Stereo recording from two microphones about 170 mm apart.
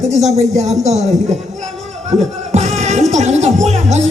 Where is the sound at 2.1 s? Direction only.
45° right (ahead or behind).